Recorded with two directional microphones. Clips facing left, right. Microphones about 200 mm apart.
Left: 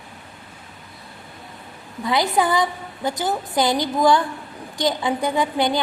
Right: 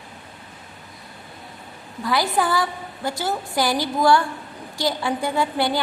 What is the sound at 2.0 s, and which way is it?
A woman's voice, 20° left (ahead or behind).